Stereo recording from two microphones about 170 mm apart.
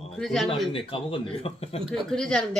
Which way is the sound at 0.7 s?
30° left (ahead or behind).